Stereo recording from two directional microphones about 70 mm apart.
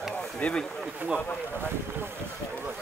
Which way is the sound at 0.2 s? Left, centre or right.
Centre.